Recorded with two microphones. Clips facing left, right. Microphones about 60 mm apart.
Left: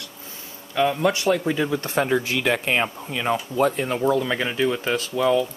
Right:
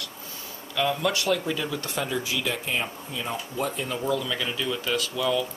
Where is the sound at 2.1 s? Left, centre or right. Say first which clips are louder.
Left 7 dB; left.